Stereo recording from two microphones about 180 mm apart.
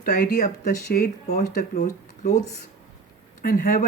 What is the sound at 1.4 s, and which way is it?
Speech, 40° left (ahead or behind).